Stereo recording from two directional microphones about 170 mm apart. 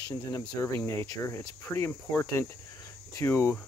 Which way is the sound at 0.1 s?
20° left (ahead or behind).